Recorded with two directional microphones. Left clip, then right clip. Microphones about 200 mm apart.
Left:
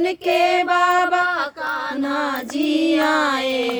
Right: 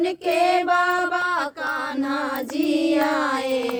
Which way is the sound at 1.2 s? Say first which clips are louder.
Left 2 dB; 65° right (ahead or behind).